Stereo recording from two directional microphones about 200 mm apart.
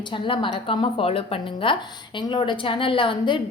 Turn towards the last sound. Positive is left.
turn(degrees=25)  # may be behind; listen again after turning